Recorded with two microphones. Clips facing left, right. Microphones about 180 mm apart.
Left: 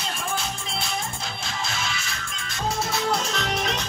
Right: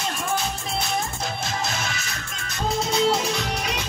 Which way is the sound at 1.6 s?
45° right (ahead or behind).